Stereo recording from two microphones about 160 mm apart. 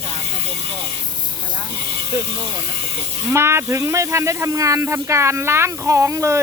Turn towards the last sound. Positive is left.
turn(degrees=-20)  # may be behind; listen again after turning